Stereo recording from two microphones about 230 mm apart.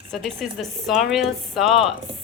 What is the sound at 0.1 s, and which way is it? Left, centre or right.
Speech, centre.